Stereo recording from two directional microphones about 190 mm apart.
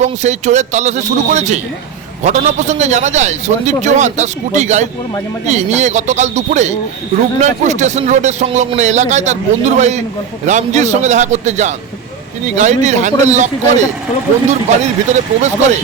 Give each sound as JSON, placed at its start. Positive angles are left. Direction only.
{"t": 0.0, "sound": "a man's voice", "side_deg": -40}